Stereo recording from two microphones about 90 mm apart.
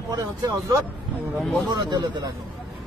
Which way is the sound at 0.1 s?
45° right (ahead or behind).